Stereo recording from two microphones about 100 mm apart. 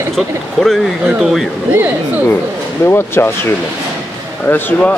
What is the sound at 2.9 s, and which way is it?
Speech, 25° left (ahead or behind).